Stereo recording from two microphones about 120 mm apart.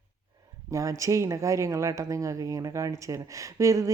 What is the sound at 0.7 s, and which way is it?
Speech, 25° right (ahead or behind).